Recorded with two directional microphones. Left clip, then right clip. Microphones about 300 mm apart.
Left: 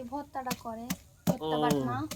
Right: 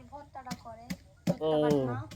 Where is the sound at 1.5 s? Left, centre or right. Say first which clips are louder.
Right 2 dB; left.